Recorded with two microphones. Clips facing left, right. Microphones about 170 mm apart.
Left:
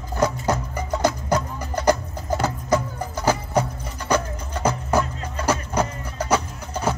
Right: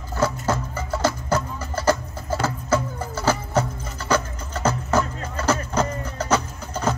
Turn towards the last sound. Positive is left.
turn(degrees=10)  # may be behind; listen again after turning